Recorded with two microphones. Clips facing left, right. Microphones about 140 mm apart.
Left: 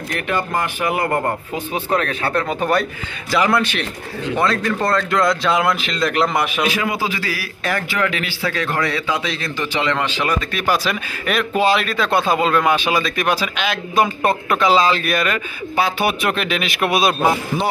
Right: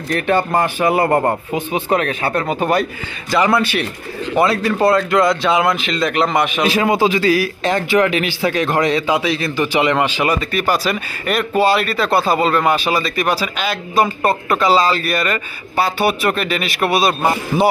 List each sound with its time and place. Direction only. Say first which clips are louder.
0.5 s speech: right 5 dB; 35° right (ahead or behind)
1.5 s a man's voice: right 3 dB; 15° right (ahead or behind); by 6.6 s centre (ahead or behind)
6.6 s a man's voice: right 6 dB; 25° right (ahead or behind); by 17.6 s centre (ahead or behind)